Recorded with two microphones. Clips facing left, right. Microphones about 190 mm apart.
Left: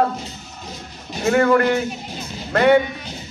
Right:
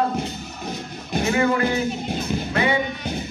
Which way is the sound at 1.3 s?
60° left (ahead or behind).